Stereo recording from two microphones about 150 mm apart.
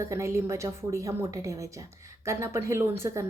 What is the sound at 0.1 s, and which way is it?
A woman's voice, 20° right (ahead or behind).